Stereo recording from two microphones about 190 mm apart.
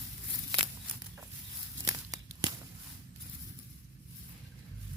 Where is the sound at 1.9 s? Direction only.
20° right (ahead or behind).